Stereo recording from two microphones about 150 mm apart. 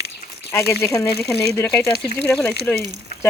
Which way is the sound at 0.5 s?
15° left (ahead or behind).